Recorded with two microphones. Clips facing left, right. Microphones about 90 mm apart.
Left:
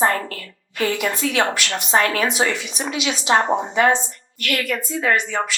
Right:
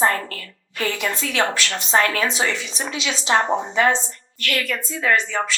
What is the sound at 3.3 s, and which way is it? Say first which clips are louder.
Speech: left 1 dB; 35° left (ahead or behind).